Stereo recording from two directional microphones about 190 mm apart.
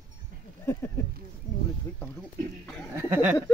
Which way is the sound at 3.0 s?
10° right (ahead or behind).